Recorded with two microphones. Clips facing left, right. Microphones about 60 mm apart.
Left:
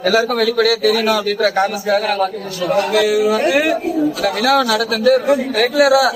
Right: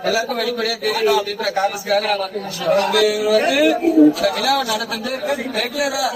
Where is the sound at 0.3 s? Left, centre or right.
Left.